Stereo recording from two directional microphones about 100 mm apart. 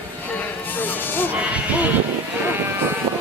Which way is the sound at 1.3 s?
15° right (ahead or behind).